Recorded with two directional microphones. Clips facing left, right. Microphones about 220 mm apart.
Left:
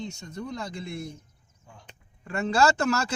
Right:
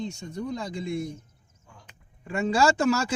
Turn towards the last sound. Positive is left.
turn(degrees=-10)  # may be behind; listen again after turning